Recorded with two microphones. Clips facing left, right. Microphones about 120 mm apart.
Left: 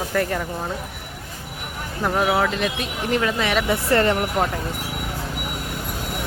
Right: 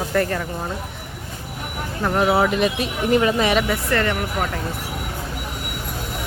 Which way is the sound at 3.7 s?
30° left (ahead or behind).